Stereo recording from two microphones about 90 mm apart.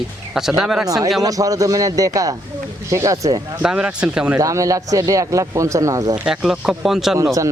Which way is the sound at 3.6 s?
10° right (ahead or behind).